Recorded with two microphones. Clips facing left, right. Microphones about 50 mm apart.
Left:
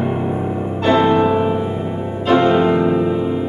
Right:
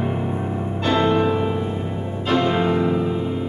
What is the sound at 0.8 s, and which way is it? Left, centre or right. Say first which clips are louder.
Music: left 5 dB; centre.